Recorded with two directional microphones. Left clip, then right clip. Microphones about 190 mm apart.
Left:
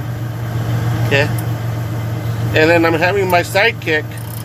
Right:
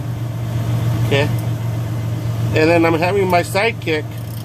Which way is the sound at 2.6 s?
15° right (ahead or behind).